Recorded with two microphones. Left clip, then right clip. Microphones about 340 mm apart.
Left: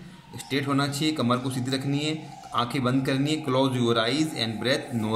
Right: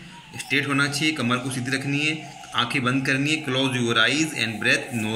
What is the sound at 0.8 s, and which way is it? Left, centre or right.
A man's voice, left.